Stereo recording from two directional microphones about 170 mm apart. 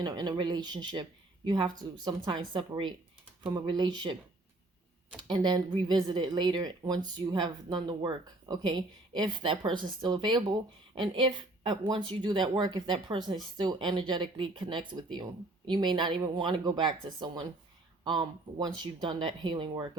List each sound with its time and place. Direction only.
0.0 s a woman's voice: 25° right (ahead or behind)
5.3 s a woman's voice: 25° right (ahead or behind)